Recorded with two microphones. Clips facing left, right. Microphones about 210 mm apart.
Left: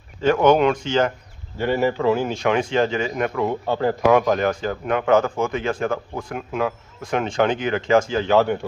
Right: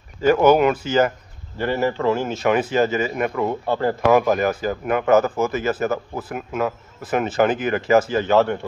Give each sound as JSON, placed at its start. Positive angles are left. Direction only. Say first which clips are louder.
{"t": 0.2, "sound": "speech", "louder": "right 1 dB", "side_deg": -5}